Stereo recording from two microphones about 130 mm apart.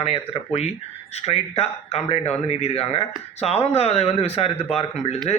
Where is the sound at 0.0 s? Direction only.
50° left (ahead or behind).